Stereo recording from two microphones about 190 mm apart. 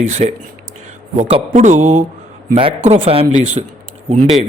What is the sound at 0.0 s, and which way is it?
A man's voice, 35° right (ahead or behind).